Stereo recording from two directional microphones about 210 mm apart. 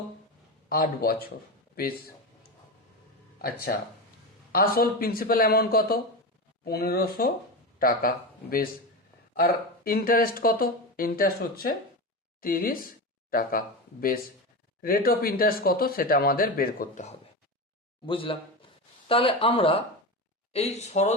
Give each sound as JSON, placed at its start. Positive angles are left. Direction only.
{"t": 0.7, "sound": "speech", "side_deg": 45}
{"t": 3.3, "sound": "speech", "side_deg": 45}
{"t": 18.0, "sound": "speech", "side_deg": 25}